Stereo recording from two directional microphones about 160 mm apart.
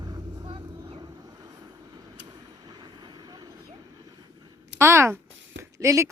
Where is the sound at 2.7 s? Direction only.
25° right (ahead or behind).